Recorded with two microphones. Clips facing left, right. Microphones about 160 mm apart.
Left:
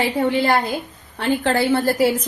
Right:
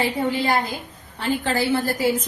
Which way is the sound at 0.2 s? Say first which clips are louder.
Left 4 dB; 70° left (ahead or behind).